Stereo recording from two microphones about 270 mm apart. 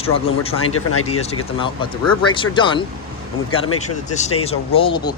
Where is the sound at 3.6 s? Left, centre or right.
Left.